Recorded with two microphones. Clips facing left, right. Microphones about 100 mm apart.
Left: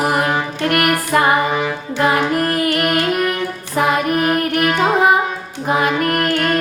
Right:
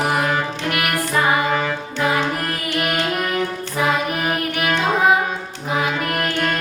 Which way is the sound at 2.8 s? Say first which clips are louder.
Left 4 dB; centre (ahead or behind).